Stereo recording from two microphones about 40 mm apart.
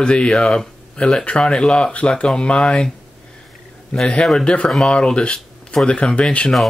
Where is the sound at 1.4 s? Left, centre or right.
Centre.